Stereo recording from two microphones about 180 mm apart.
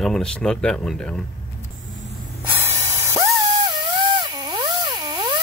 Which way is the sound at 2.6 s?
15° right (ahead or behind).